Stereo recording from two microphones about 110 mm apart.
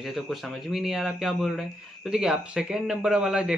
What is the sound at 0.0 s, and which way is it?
Speech, centre (ahead or behind).